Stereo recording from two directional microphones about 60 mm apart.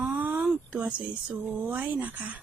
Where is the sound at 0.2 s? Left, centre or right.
Right.